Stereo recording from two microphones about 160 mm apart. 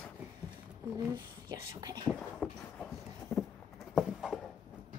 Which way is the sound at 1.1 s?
20° right (ahead or behind).